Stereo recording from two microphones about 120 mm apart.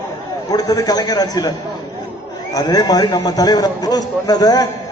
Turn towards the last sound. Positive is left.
turn(degrees=30)  # may be behind; listen again after turning